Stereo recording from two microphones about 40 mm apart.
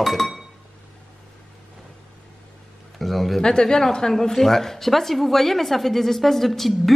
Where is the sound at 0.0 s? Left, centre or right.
Centre.